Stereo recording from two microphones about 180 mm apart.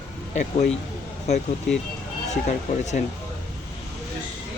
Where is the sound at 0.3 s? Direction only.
40° left (ahead or behind).